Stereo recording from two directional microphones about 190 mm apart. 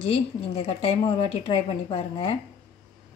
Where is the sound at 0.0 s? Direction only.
30° left (ahead or behind).